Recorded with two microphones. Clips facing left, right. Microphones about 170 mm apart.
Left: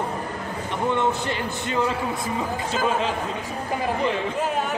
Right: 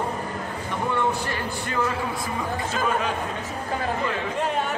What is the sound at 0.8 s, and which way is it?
Speech, 20° left (ahead or behind).